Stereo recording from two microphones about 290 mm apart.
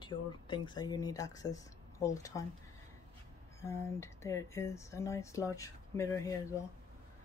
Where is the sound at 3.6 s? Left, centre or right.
Centre.